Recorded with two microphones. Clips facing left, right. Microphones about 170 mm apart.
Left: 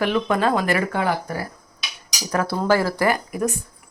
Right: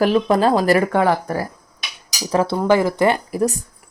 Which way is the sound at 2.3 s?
30° right (ahead or behind).